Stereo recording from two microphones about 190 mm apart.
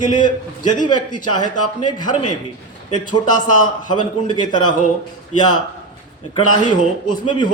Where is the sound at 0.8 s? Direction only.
25° left (ahead or behind).